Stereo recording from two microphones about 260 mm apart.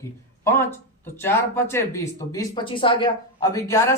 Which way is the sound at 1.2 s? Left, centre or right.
Centre.